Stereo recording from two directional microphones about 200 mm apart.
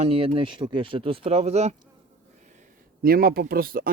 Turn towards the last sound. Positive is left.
turn(degrees=-45)  # may be behind; listen again after turning